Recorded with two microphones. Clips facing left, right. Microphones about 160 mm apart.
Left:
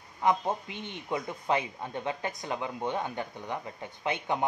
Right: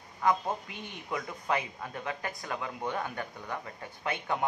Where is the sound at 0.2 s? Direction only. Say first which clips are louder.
Left 1 dB; 25° left (ahead or behind).